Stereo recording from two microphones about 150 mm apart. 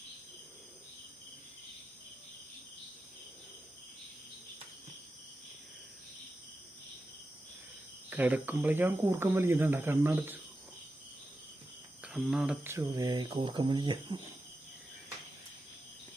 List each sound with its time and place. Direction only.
8.1 s speech: 10° right (ahead or behind)
12.0 s speech: 5° right (ahead or behind)
12.6 s speech: 20° right (ahead or behind)